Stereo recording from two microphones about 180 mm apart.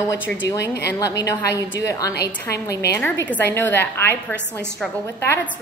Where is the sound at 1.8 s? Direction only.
20° left (ahead or behind).